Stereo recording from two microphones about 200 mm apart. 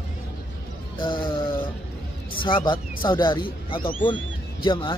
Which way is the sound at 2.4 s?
25° left (ahead or behind).